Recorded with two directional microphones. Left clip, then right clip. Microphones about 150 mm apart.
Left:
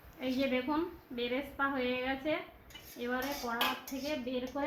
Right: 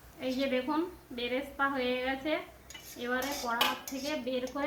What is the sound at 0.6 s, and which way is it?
A woman's voice, 25° left (ahead or behind).